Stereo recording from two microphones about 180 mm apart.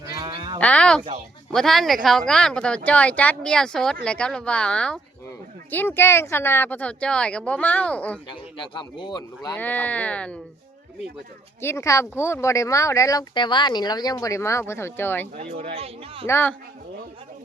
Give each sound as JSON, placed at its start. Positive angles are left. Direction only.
{"t": 0.0, "sound": "moo", "side_deg": -20}
{"t": 0.6, "sound": "speech", "side_deg": 5}
{"t": 8.3, "sound": "speech", "side_deg": 25}
{"t": 9.6, "sound": "speech", "side_deg": 10}
{"t": 11.6, "sound": "speech", "side_deg": 15}
{"t": 15.4, "sound": "speech", "side_deg": -30}
{"t": 16.2, "sound": "speech", "side_deg": 10}